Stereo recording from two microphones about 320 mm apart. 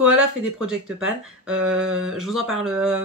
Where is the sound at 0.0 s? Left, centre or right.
Centre.